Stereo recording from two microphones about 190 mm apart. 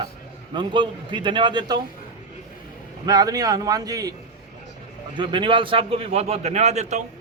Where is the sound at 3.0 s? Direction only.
20° right (ahead or behind).